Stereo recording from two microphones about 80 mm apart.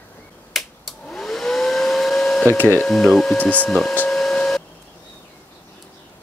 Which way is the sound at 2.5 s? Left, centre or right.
Centre.